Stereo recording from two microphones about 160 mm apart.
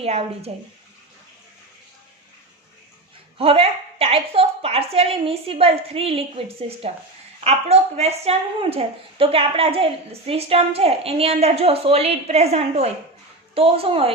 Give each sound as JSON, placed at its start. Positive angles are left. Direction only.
{"t": 0.0, "sound": "a woman's voice", "side_deg": -40}
{"t": 3.3, "sound": "a woman's voice", "side_deg": -35}